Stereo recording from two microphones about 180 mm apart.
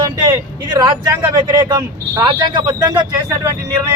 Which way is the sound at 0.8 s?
25° right (ahead or behind).